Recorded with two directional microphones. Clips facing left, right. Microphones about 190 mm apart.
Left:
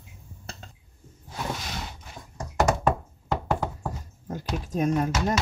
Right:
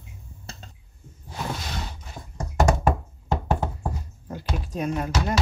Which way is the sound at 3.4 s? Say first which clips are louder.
Right 1 dB; 25° right (ahead or behind).